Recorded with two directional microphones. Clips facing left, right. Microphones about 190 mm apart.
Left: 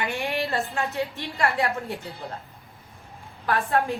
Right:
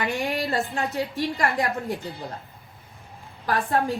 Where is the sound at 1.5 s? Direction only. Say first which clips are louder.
Right 1 dB; 15° right (ahead or behind).